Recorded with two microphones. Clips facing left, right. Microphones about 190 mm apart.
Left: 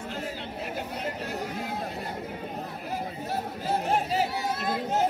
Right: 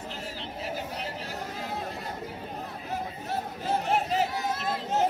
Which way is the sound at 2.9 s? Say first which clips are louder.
Even; 10° left (ahead or behind).